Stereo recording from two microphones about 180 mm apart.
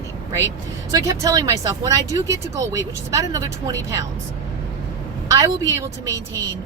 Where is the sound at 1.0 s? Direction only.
20° right (ahead or behind).